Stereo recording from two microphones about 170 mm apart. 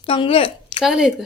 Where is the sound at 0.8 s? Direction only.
Centre (ahead or behind).